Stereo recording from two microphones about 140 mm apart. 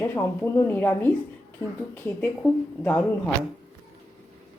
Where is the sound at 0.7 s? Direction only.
15° left (ahead or behind).